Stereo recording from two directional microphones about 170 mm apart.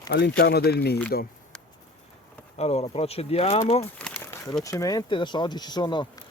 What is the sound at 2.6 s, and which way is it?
Speech, 35° left (ahead or behind).